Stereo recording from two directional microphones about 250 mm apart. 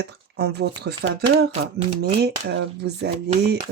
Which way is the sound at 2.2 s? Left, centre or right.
Right.